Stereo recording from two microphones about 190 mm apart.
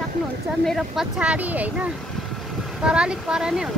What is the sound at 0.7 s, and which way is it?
Speech, centre (ahead or behind).